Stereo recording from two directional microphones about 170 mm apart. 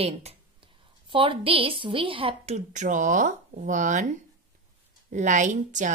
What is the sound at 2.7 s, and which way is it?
Speech, 45° right (ahead or behind).